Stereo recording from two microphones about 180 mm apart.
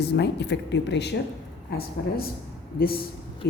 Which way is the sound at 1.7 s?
55° left (ahead or behind).